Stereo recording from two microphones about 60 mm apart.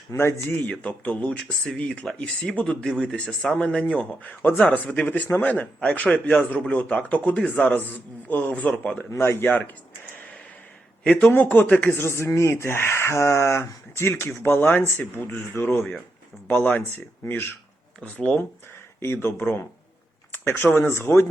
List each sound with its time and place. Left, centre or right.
0.2 s speech: left
0.6 s a man's voice: left
9.1 s speech: left
9.5 s speech: left
11.0 s speech: centre
11.3 s speech: left
11.9 s speech: left
16.6 s a man's voice: left
17.2 s speech: left
19.0 s speech: left